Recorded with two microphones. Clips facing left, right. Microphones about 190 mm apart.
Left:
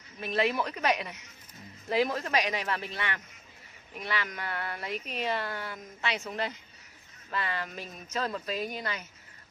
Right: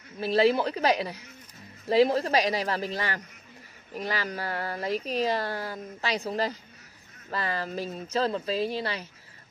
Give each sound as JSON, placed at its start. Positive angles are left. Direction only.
{"t": 0.2, "sound": "speech", "side_deg": -30}